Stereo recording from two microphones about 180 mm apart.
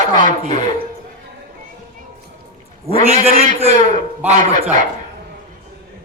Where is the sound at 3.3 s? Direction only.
35° right (ahead or behind).